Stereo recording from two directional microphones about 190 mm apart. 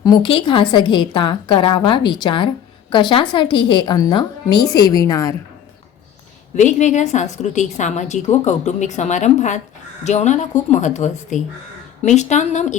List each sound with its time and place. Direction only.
0.0 s a woman's voice: 25° left (ahead or behind)
6.6 s a woman's voice: 40° left (ahead or behind)